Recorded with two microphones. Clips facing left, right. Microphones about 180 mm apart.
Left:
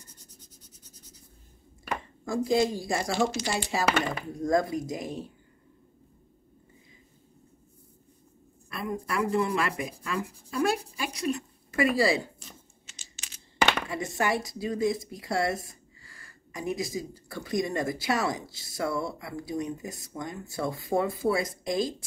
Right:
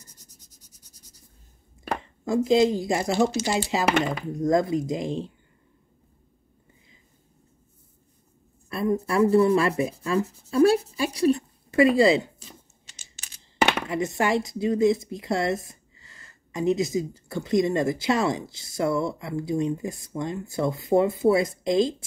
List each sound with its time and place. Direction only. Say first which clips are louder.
0.6 s writing: left 3 dB; 10° right (ahead or behind)
2.2 s speech: right 5 dB; 20° right (ahead or behind)
8.6 s a woman's voice: right 8 dB; 30° right (ahead or behind)
13.8 s speech: right 4 dB; 20° right (ahead or behind)